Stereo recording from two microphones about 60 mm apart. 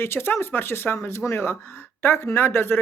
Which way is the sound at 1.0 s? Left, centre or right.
Left.